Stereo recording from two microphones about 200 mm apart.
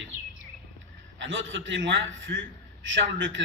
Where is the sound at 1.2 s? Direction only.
70° right (ahead or behind).